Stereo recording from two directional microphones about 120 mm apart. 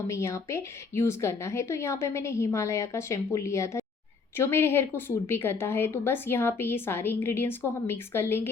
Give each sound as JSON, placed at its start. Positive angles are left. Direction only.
{"t": 0.1, "sound": "a woman's voice", "side_deg": 25}